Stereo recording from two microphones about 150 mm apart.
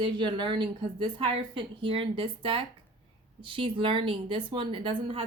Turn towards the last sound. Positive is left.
turn(degrees=-35)  # may be behind; listen again after turning